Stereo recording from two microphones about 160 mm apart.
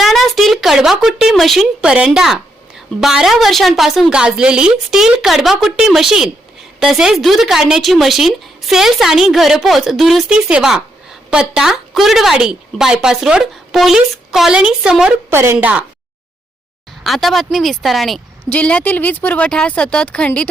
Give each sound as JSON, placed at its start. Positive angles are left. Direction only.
{"t": 0.0, "sound": "speech", "side_deg": 0}
{"t": 15.3, "sound": "a woman's voice", "side_deg": -15}
{"t": 17.0, "sound": "speech", "side_deg": 0}